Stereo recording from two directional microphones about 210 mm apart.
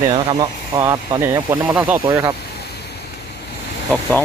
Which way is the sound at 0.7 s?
15° right (ahead or behind).